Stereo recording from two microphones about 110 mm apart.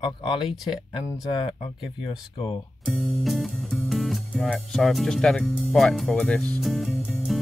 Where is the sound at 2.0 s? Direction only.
55° left (ahead or behind).